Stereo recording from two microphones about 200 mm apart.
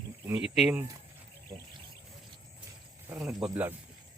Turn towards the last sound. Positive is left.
turn(degrees=-10)  # may be behind; listen again after turning